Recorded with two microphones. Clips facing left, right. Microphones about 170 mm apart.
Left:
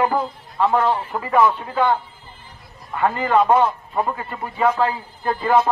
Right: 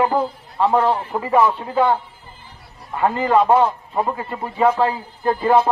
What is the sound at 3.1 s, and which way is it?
A man's voice, 30° right (ahead or behind).